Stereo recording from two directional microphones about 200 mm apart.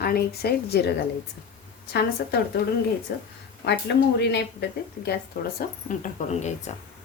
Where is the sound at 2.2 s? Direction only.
55° left (ahead or behind).